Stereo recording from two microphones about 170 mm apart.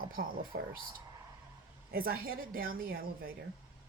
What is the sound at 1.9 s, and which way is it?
A woman's voice, 60° right (ahead or behind).